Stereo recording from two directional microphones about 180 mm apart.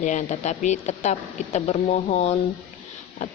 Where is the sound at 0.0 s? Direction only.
45° left (ahead or behind).